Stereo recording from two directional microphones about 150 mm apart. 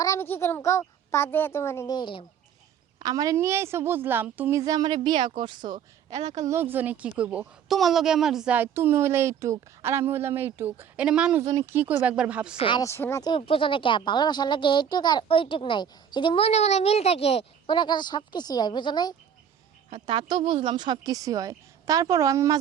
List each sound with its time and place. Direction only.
0.0 s a child's voice: 20° left (ahead or behind)
2.0 s speech: 35° left (ahead or behind)
3.0 s a woman's voice: 25° right (ahead or behind)
6.1 s a woman's voice: 50° right (ahead or behind)
6.5 s a woman's voice: 15° right (ahead or behind)
12.5 s speech: 35° left (ahead or behind)
12.8 s speech: 15° left (ahead or behind)
13.3 s speech: 35° left (ahead or behind)
19.9 s a woman's voice: 30° right (ahead or behind)